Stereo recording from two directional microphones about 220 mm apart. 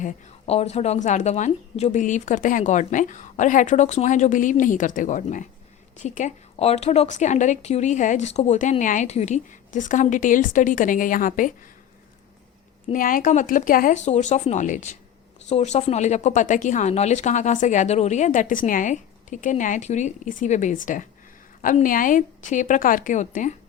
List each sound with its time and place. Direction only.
0.0 s speech: 30° left (ahead or behind)
12.9 s speech: 40° left (ahead or behind)